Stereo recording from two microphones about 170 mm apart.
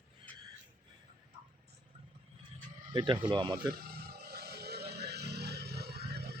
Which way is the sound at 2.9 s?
25° right (ahead or behind).